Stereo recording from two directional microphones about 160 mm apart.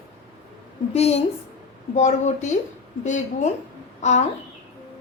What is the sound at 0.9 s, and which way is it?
A woman's voice, 40° left (ahead or behind).